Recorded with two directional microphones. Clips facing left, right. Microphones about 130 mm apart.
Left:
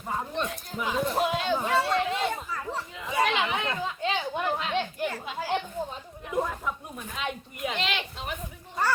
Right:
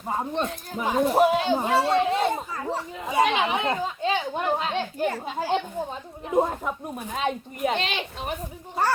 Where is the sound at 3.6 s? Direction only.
40° right (ahead or behind).